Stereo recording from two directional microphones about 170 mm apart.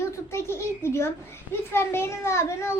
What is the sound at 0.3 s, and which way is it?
A child's voice, 15° left (ahead or behind).